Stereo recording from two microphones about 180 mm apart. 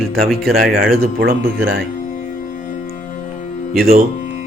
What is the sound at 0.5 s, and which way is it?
Speech, 55° right (ahead or behind).